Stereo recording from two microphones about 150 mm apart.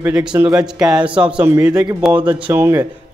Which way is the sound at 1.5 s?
20° right (ahead or behind).